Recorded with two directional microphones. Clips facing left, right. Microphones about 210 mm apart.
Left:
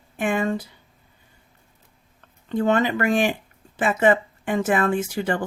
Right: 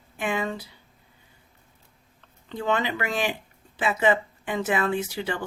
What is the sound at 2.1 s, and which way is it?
Speech, 50° left (ahead or behind).